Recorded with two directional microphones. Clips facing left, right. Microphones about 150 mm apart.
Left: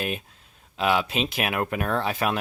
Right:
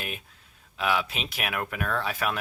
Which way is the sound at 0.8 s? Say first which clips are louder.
Left 4 dB; 25° left (ahead or behind).